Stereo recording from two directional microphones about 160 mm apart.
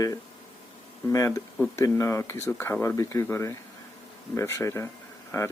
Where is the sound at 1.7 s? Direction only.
20° left (ahead or behind).